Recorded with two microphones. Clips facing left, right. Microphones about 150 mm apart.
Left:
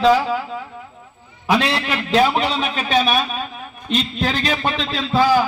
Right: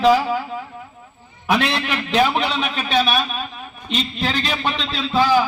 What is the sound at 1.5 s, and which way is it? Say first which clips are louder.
A man's voice: left 1 dB; 35° left (ahead or behind).